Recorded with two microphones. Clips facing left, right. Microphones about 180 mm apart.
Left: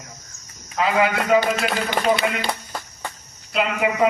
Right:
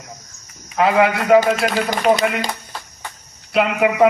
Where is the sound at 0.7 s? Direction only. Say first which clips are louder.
Right 4 dB; 60° right (ahead or behind).